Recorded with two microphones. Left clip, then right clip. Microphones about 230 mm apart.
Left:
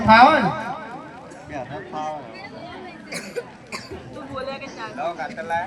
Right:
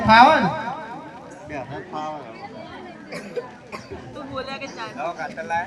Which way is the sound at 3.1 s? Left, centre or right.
Left.